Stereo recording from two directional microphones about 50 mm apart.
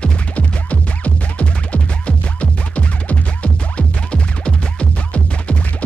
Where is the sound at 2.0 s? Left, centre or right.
Left.